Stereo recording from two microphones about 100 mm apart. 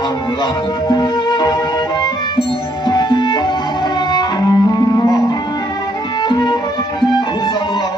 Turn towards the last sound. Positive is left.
turn(degrees=45)  # may be behind; listen again after turning